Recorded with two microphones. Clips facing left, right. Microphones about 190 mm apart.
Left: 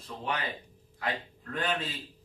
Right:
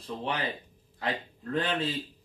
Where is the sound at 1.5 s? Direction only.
30° right (ahead or behind).